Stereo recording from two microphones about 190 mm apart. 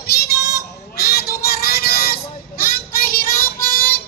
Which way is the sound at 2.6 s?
50° left (ahead or behind).